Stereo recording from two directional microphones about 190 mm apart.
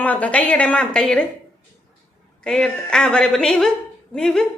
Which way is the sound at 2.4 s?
5° left (ahead or behind).